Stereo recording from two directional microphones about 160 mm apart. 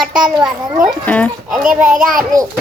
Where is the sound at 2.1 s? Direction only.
60° right (ahead or behind).